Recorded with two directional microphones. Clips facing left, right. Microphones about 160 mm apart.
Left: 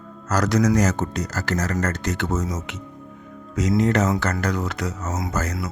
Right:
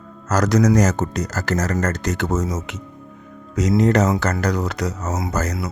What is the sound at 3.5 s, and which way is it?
Speech, 40° right (ahead or behind).